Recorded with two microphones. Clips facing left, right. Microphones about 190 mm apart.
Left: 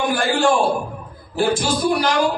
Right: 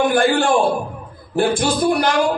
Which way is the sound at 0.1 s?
55° right (ahead or behind).